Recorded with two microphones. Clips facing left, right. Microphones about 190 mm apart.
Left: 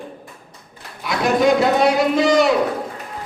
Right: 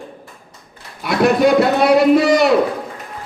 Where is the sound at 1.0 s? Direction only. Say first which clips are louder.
Right 6 dB; 60° right (ahead or behind).